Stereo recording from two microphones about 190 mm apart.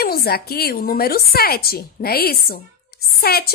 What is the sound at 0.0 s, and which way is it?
A woman's voice, 55° left (ahead or behind).